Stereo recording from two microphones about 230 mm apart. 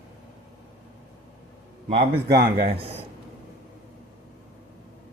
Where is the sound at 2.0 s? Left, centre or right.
Right.